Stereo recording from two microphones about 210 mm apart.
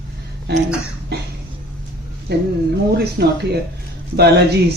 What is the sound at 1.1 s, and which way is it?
Speech, 50° right (ahead or behind).